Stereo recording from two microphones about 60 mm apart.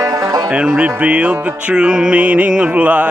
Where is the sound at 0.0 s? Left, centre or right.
Right.